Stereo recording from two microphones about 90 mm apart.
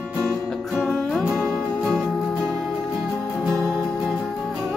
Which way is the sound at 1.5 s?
5° left (ahead or behind).